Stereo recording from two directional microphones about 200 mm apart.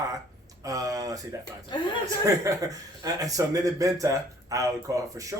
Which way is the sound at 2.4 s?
15° right (ahead or behind).